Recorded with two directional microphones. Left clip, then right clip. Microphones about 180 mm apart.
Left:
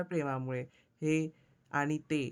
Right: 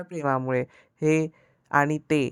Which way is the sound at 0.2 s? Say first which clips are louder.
Right 15 dB; 30° right (ahead or behind).